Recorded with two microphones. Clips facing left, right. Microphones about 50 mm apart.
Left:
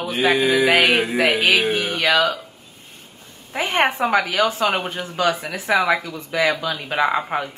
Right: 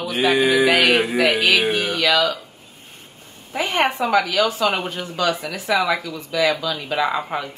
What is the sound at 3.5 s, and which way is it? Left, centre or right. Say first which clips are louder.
A woman's voice: left 1 dB; left.